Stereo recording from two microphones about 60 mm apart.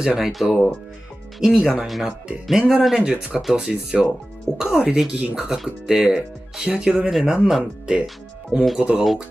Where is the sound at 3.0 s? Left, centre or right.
Centre.